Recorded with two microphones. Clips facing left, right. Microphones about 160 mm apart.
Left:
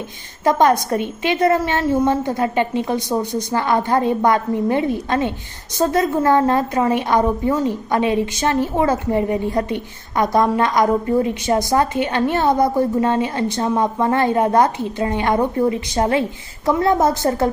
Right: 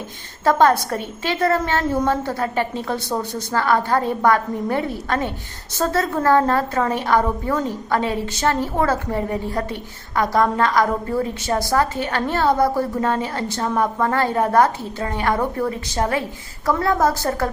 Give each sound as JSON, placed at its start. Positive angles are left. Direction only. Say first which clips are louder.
{"t": 0.4, "sound": "a woman's voice", "louder": "left 1 dB", "side_deg": 15}